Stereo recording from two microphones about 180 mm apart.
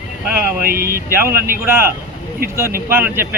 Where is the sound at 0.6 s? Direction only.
55° right (ahead or behind).